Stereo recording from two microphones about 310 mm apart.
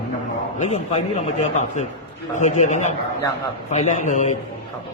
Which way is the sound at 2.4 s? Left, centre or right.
Left.